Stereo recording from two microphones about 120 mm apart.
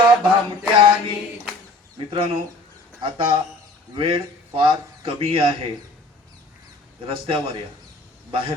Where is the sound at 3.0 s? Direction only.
45° right (ahead or behind).